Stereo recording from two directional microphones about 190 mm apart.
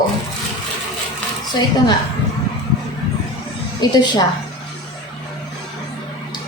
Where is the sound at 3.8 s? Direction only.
20° left (ahead or behind).